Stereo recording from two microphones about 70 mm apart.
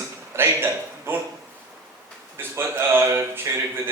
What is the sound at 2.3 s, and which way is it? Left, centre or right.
Speech, right.